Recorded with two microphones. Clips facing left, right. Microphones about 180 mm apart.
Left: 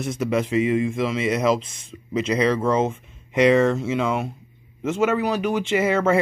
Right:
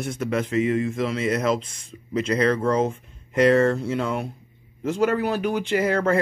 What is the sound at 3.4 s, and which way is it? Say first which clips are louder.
Speech: left 1 dB; 90° left.